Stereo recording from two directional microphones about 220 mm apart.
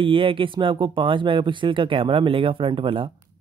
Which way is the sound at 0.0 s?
25° right (ahead or behind).